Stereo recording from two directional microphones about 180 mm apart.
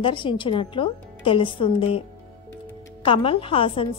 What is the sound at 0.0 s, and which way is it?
A woman's voice, 30° left (ahead or behind).